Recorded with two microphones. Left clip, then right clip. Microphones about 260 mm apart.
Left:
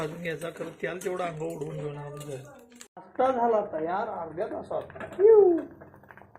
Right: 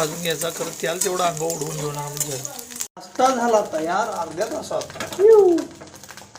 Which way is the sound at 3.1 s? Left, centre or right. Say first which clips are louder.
Right 6 dB; right.